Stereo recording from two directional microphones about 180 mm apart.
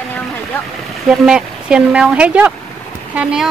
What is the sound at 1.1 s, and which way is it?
Speech, 5° right (ahead or behind).